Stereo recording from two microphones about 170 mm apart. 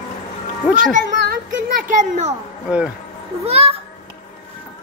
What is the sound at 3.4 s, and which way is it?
Speech, 35° right (ahead or behind).